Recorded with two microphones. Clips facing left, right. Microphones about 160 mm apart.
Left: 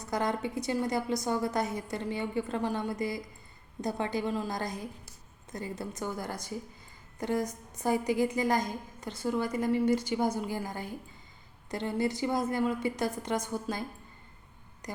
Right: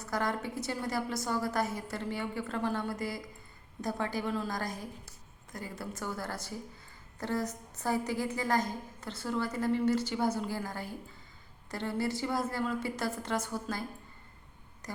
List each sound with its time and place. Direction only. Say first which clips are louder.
0.0 s a woman's voice: left 2 dB; 20° left (ahead or behind)